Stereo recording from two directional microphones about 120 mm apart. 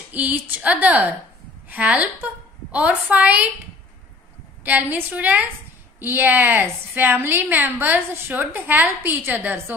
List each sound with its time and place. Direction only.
0.1 s a woman's voice: 15° right (ahead or behind)
4.6 s a woman's voice: 15° right (ahead or behind)